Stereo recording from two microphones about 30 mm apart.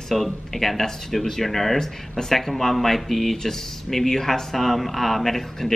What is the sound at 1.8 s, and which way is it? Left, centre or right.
Speech, centre.